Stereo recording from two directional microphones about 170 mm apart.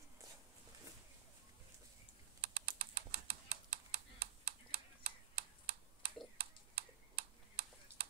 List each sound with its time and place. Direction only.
2.4 s typing: 65° right (ahead or behind)
6.3 s tick-tock: 70° right (ahead or behind)